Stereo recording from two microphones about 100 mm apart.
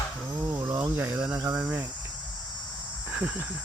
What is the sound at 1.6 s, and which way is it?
Cricket, 15° right (ahead or behind).